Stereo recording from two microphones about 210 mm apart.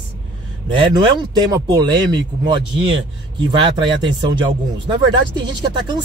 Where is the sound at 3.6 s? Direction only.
20° right (ahead or behind).